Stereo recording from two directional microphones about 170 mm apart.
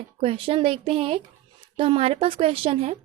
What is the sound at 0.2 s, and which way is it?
A woman's voice, 35° right (ahead or behind).